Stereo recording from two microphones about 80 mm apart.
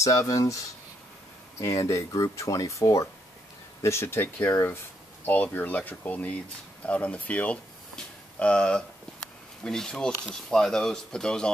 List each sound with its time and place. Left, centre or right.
0.0 s speech: left; by 11.5 s centre